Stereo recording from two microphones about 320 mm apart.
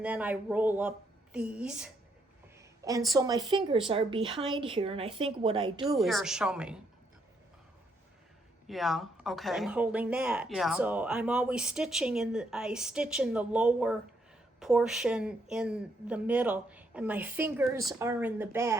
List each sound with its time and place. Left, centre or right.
0.0 s a woman's voice: centre
5.8 s speech: centre
8.6 s speech: centre